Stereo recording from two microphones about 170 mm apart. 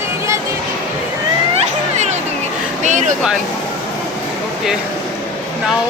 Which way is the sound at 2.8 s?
45° right (ahead or behind).